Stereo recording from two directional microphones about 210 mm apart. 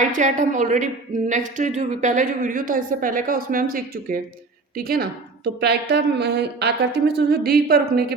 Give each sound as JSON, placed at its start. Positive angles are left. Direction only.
{"t": 0.0, "sound": "a woman's voice", "side_deg": -35}